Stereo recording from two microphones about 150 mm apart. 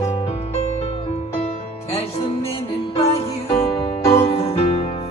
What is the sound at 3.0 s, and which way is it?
Music, 45° left (ahead or behind).